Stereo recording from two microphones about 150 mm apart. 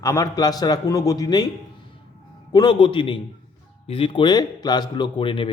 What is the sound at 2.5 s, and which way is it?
A man's voice, 30° left (ahead or behind).